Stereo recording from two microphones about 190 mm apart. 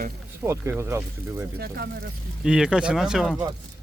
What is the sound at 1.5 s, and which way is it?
Speech, 55° right (ahead or behind).